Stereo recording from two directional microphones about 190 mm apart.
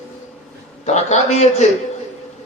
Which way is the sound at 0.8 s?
35° left (ahead or behind).